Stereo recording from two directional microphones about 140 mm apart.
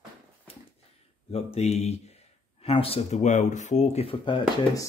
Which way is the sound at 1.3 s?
50° left (ahead or behind).